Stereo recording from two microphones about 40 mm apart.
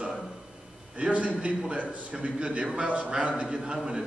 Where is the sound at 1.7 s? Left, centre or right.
Right.